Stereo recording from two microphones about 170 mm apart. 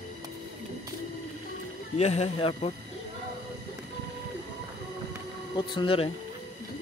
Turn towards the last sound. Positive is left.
turn(degrees=30)  # may be behind; listen again after turning